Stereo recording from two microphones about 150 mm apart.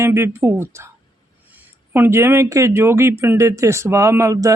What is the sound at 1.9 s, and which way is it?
Speech, 15° right (ahead or behind).